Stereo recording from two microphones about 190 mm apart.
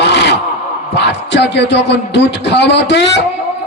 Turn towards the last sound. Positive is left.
turn(degrees=65)  # may be behind; listen again after turning